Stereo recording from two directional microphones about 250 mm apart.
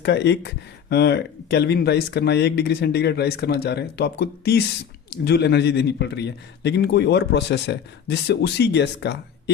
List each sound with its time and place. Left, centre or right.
0.0 s speech: left